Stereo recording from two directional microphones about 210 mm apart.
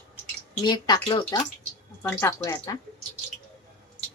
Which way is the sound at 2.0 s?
10° left (ahead or behind).